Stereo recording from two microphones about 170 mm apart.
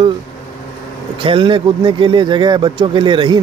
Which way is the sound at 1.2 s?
30° right (ahead or behind).